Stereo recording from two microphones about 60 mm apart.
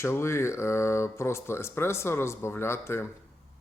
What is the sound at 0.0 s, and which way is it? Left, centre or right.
Speech, left.